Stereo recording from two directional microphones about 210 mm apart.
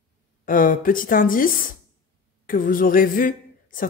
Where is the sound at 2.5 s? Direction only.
40° left (ahead or behind).